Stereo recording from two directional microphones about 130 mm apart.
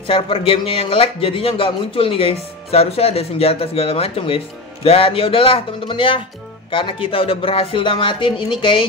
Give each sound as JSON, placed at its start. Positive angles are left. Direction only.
{"t": 0.0, "sound": "speech", "side_deg": 45}